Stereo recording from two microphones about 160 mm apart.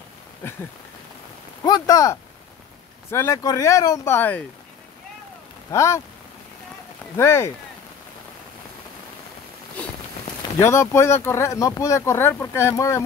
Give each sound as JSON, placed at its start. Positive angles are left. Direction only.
{"t": 0.4, "sound": "speech", "side_deg": 15}
{"t": 5.7, "sound": "speech", "side_deg": 20}
{"t": 7.2, "sound": "speech", "side_deg": 15}
{"t": 10.6, "sound": "speech", "side_deg": 15}